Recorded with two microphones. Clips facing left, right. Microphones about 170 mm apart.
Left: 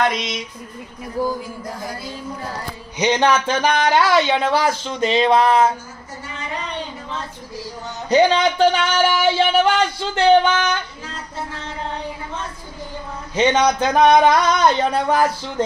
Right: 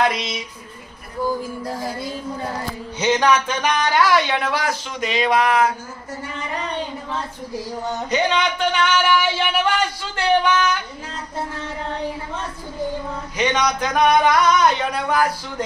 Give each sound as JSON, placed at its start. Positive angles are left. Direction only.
{"t": 0.0, "sound": "a sound", "side_deg": 0}
{"t": 1.2, "sound": "speech", "side_deg": 30}
{"t": 3.0, "sound": "speech", "side_deg": 20}
{"t": 3.3, "sound": "speech", "side_deg": 30}
{"t": 8.1, "sound": "speech", "side_deg": 35}
{"t": 13.4, "sound": "speech", "side_deg": 30}